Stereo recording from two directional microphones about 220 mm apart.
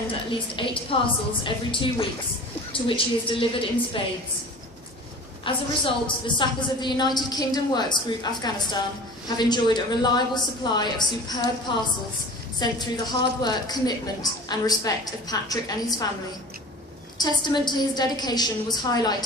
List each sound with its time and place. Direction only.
0.3 s a woman's voice: 25° left (ahead or behind)
5.5 s a woman's voice: 20° left (ahead or behind)
12.5 s a woman's voice: 20° left (ahead or behind)
17.2 s a woman's voice: 20° left (ahead or behind)